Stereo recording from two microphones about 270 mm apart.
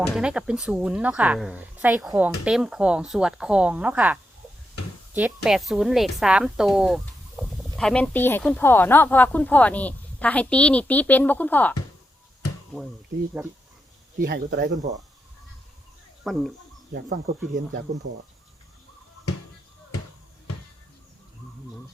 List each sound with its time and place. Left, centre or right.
0.1 s a woman's voice: centre
14.2 s speech: right
16.2 s speech: centre
17.9 s speech: centre